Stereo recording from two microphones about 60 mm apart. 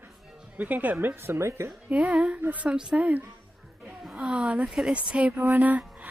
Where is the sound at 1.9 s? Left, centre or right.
Right.